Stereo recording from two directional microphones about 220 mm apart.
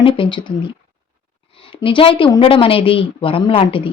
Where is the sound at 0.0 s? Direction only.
25° left (ahead or behind).